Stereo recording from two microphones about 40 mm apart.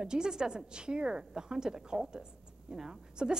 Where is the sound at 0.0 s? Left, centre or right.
Centre.